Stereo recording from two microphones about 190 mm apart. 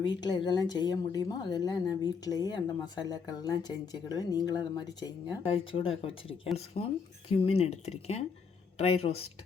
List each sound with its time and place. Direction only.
0.2 s a woman's voice: 20° left (ahead or behind)